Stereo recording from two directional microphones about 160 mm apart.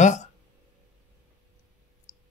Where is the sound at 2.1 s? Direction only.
50° left (ahead or behind).